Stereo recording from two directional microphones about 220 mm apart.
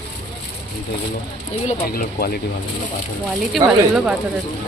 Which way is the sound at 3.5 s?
5° right (ahead or behind).